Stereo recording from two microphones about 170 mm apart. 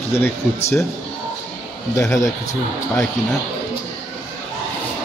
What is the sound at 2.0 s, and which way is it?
Speech, 20° left (ahead or behind).